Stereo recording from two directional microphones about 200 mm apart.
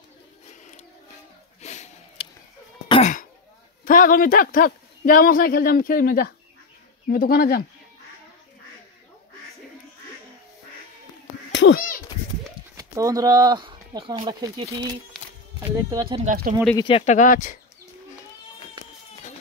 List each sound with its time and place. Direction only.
1.6 s a sound: 35° left (ahead or behind)
2.9 s throat clearing: 35° left (ahead or behind)
3.8 s a man's voice: 45° left (ahead or behind)
11.5 s a sound: 60° left (ahead or behind)
12.7 s speech: 15° right (ahead or behind)
16.7 s speech: 25° left (ahead or behind)